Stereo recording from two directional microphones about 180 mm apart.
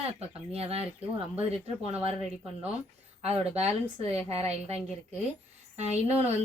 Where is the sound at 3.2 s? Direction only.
35° right (ahead or behind).